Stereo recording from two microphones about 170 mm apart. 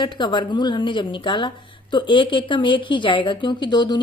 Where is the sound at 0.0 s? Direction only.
25° left (ahead or behind).